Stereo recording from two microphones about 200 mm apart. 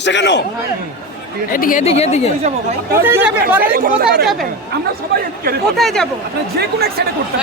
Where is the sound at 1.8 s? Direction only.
30° left (ahead or behind).